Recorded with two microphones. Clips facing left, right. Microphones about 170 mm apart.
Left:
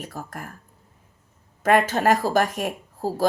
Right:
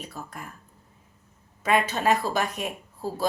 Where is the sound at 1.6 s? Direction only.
50° left (ahead or behind).